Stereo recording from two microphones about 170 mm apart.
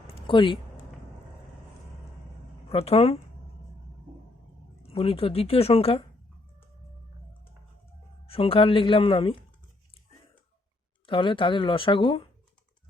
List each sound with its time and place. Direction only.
0.1 s a sound: 30° left (ahead or behind)
2.6 s speech: 35° left (ahead or behind)
4.8 s speech: 35° left (ahead or behind)
8.3 s speech: 35° left (ahead or behind)
11.0 s speech: 30° left (ahead or behind)